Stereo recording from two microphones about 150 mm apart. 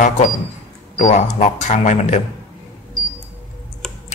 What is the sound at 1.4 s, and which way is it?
Speech, 50° left (ahead or behind).